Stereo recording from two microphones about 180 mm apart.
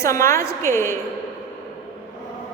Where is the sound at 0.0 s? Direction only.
15° left (ahead or behind).